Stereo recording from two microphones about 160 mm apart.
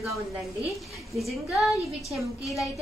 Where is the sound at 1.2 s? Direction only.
Centre (ahead or behind).